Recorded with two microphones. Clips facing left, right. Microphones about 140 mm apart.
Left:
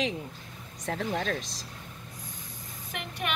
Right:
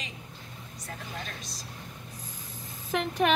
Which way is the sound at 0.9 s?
60° left (ahead or behind).